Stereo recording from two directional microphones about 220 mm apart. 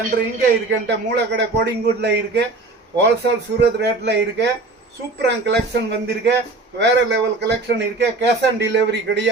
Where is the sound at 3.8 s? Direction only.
50° right (ahead or behind).